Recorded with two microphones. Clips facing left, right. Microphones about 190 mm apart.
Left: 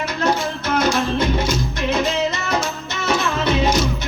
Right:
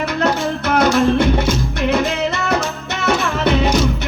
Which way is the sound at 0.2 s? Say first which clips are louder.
Right 1 dB; 65° right (ahead or behind).